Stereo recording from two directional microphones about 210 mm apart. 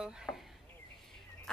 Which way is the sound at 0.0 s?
5° right (ahead or behind).